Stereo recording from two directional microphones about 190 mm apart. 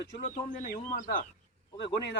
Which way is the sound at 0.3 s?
45° left (ahead or behind).